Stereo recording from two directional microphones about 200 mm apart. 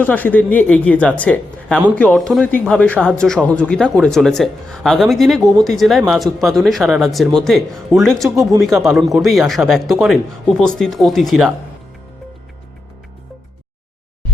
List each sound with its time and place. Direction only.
0.0 s a woman's voice: 10° left (ahead or behind)